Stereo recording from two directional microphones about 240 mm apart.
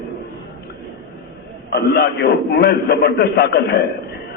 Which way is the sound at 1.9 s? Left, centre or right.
Left.